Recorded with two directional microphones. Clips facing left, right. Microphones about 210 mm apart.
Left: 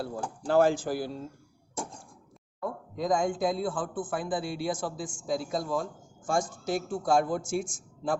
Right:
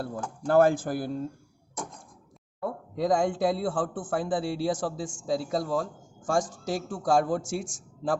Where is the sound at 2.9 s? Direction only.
35° right (ahead or behind).